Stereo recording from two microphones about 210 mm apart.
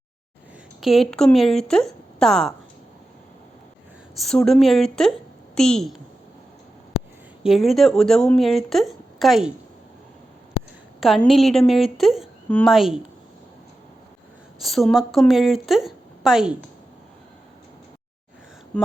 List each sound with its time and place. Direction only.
0.8 s a woman's voice: centre (ahead or behind)
4.2 s a woman's voice: centre (ahead or behind)
7.4 s a woman's voice: centre (ahead or behind)
11.0 s a woman's voice: centre (ahead or behind)
14.6 s a woman's voice: centre (ahead or behind)
18.7 s a sound: 5° left (ahead or behind)